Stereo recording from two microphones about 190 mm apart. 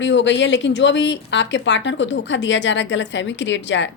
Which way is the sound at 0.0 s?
70° left (ahead or behind).